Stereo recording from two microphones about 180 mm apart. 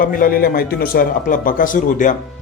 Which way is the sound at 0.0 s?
50° left (ahead or behind).